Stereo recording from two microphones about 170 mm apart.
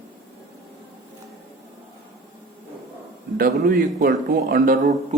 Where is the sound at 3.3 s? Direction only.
60° right (ahead or behind).